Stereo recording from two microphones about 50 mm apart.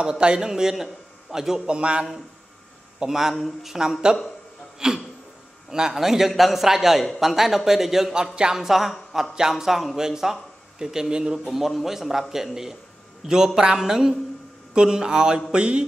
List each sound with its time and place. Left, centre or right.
0.0 s a man's voice: centre
1.8 s a man's voice: right
3.0 s a man's voice: centre